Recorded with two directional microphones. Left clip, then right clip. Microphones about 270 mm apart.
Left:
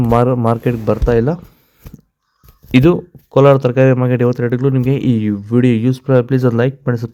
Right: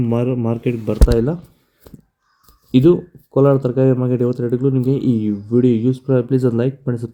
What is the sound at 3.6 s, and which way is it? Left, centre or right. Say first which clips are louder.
Speech: left 4 dB; left.